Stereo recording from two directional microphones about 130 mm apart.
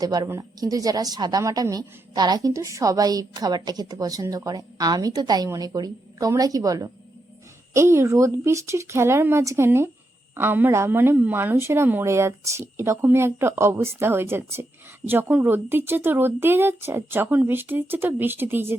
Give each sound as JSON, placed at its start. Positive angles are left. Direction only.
{"t": 0.0, "sound": "a woman's voice", "side_deg": -30}